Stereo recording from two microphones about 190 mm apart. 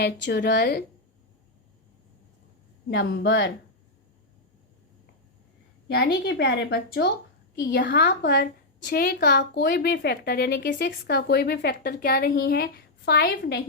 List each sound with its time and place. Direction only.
0.0 s a woman's voice: 60° left (ahead or behind)
2.9 s a woman's voice: 65° left (ahead or behind)
6.2 s a woman's voice: 55° left (ahead or behind)